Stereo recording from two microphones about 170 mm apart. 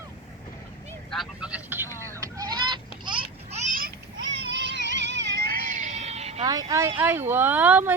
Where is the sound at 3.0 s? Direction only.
30° right (ahead or behind).